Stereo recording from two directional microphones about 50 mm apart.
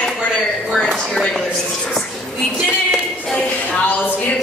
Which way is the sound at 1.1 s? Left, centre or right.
Centre.